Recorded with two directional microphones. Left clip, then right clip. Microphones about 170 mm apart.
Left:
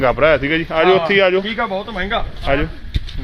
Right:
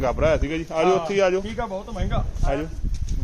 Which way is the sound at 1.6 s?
55° right (ahead or behind).